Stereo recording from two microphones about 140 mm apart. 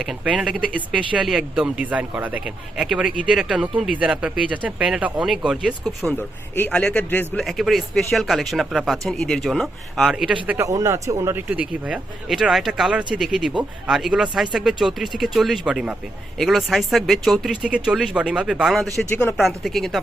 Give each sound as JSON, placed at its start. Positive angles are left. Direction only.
{"t": 0.0, "sound": "speech", "side_deg": -5}
{"t": 6.1, "sound": "speech", "side_deg": 10}
{"t": 7.4, "sound": "speech", "side_deg": 0}
{"t": 10.7, "sound": "speech", "side_deg": -20}
{"t": 11.4, "sound": "speech", "side_deg": -10}